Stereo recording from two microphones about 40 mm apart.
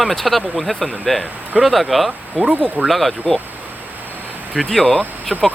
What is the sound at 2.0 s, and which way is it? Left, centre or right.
Speech, right.